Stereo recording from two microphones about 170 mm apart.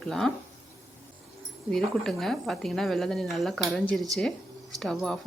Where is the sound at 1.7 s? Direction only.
Centre (ahead or behind).